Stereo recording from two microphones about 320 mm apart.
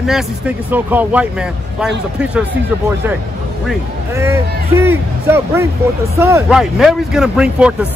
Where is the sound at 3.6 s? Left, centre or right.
Centre.